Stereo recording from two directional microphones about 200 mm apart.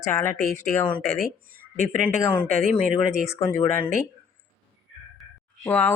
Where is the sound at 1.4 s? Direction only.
45° right (ahead or behind).